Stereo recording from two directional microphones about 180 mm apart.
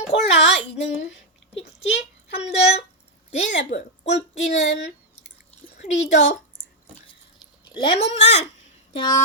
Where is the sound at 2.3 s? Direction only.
35° left (ahead or behind).